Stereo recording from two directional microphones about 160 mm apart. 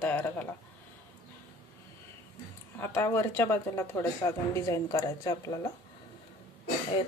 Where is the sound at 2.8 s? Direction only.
15° left (ahead or behind).